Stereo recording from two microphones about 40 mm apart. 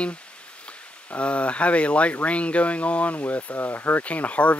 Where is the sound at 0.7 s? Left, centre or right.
Left.